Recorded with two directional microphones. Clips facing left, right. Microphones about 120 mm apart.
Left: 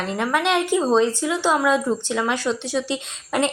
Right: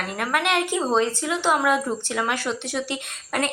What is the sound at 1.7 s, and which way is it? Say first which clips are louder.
Speech: left 3 dB; 10° right (ahead or behind).